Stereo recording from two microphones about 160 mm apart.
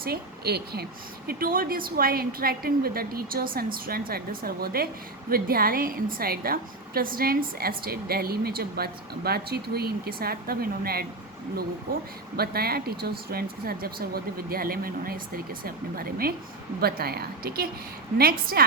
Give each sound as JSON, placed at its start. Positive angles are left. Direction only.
{"t": 0.0, "sound": "a woman's voice", "side_deg": -80}
{"t": 1.3, "sound": "a woman's voice", "side_deg": -65}
{"t": 12.4, "sound": "a woman's voice", "side_deg": -75}